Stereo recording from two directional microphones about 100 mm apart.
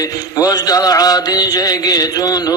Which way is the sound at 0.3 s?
35° left (ahead or behind).